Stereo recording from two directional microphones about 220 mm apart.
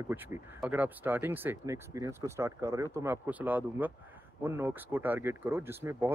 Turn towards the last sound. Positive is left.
turn(degrees=-10)  # may be behind; listen again after turning